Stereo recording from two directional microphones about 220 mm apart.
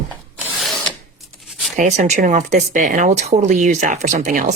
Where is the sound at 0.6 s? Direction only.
Centre (ahead or behind).